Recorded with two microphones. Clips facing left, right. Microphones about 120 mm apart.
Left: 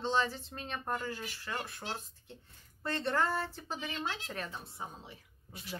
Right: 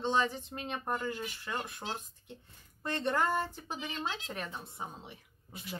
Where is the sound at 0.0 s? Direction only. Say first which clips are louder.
Right 1 dB; 20° right (ahead or behind).